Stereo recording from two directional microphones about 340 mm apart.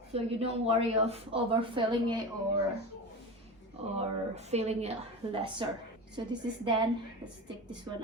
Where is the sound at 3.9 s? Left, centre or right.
Centre.